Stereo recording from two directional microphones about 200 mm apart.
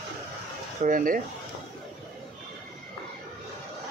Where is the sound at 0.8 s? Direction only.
45° right (ahead or behind).